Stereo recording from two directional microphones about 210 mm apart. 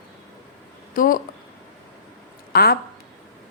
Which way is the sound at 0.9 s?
40° left (ahead or behind).